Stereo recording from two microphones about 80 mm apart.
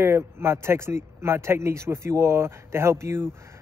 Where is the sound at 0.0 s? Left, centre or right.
Right.